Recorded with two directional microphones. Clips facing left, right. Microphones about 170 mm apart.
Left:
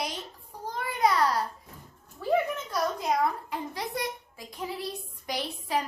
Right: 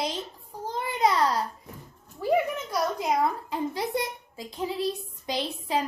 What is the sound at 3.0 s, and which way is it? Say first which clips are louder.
A child's voice: right 2 dB; 25° right (ahead or behind).